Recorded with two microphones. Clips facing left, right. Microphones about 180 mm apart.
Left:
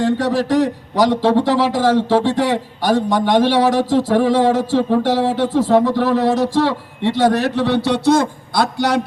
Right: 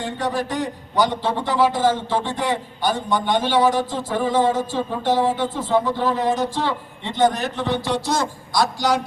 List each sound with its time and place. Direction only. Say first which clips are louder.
0.3 s a man's voice: left 8 dB; 90° left; by 9.0 s 60° left (ahead or behind)